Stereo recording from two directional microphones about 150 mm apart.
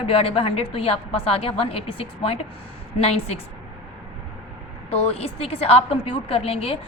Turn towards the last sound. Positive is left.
turn(degrees=40)  # may be behind; listen again after turning